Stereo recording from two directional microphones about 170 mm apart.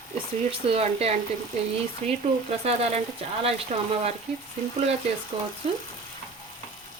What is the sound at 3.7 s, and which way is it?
Speech, 45° right (ahead or behind).